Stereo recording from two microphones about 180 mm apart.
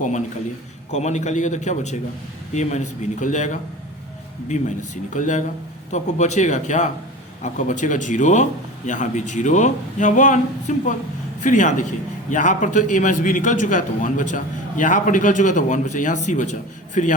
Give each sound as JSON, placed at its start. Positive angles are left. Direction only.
{"t": 0.9, "sound": "a man's voice", "side_deg": 40}
{"t": 5.1, "sound": "a man's voice", "side_deg": 45}